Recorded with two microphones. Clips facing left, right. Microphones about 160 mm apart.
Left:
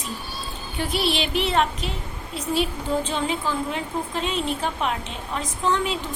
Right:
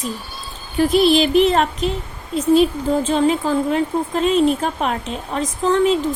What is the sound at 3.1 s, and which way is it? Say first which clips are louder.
A woman's voice: right 9 dB; 40° right (ahead or behind).